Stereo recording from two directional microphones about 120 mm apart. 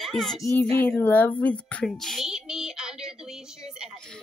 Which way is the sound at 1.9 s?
Centre (ahead or behind).